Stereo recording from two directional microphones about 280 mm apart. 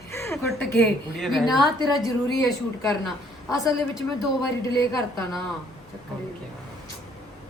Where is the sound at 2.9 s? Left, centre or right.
Centre.